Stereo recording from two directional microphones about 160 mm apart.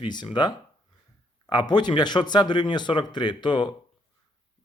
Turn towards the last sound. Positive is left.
turn(degrees=30)  # may be behind; listen again after turning